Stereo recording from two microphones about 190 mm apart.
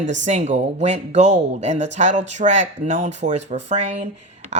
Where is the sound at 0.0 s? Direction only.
40° right (ahead or behind).